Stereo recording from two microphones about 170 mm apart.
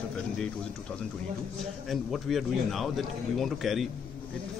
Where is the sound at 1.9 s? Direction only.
Centre (ahead or behind).